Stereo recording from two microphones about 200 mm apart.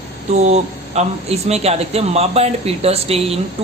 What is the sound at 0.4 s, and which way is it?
Speech, 35° right (ahead or behind).